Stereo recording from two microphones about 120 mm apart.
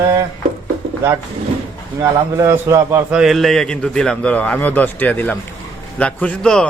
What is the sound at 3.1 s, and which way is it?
A man's voice, 5° right (ahead or behind).